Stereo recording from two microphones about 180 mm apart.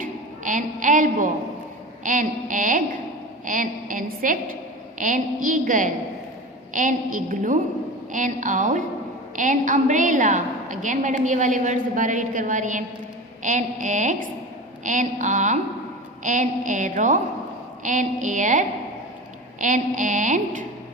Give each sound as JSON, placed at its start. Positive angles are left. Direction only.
{"t": 0.0, "sound": "a woman's voice", "side_deg": -45}